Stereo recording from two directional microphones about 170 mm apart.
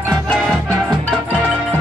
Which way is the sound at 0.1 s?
Centre (ahead or behind).